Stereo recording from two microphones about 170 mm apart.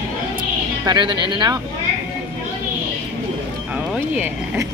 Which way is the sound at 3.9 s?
10° right (ahead or behind).